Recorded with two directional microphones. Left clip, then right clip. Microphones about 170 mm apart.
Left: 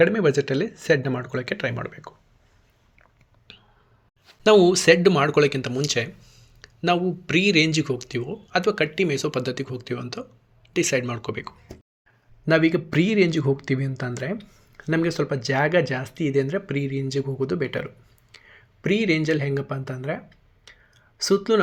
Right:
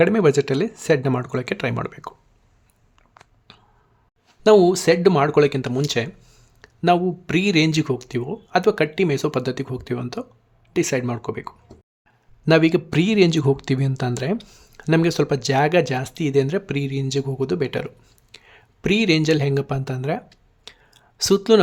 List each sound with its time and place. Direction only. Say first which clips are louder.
0.0 s speech: right 2 dB; 20° right (ahead or behind)
3.5 s finger snapping: left 2 dB; 20° right (ahead or behind)
4.5 s speech: even; 20° right (ahead or behind)
6.2 s a sound: even; 35° right (ahead or behind)
6.8 s speech: right 4 dB; 20° right (ahead or behind)